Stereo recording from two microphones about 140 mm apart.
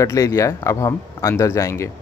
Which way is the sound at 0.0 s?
20° left (ahead or behind).